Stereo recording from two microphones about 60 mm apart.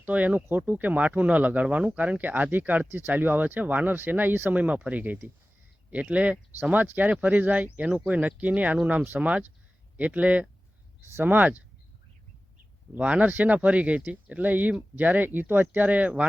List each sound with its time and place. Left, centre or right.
0.0 s speech: right
6.6 s speech: right
12.9 s speech: right